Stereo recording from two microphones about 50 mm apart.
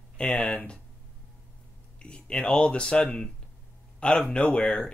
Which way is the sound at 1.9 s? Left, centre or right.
Left.